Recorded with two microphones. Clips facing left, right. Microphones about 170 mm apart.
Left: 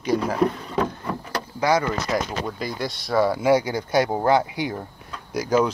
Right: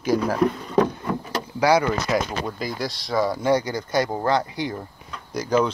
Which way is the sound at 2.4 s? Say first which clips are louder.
Even; centre (ahead or behind).